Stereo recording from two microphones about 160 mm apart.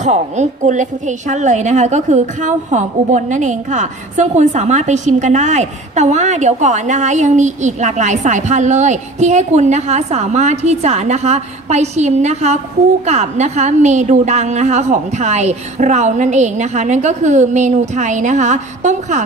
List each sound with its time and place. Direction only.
0.0 s a woman's voice: 45° right (ahead or behind)